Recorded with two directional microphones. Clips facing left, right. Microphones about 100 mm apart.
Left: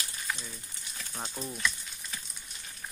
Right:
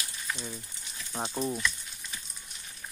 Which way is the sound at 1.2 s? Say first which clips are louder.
Right 8 dB; 30° right (ahead or behind).